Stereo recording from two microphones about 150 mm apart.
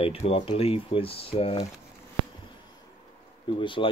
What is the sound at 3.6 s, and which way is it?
Speech, 35° left (ahead or behind).